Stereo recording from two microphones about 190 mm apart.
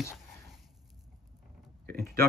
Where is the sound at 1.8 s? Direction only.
55° right (ahead or behind).